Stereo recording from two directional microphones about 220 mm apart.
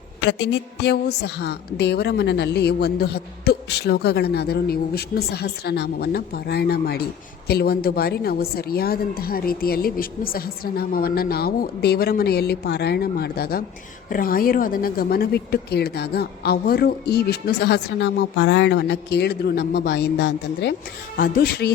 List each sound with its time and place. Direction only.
0.3 s a woman's voice: 55° left (ahead or behind)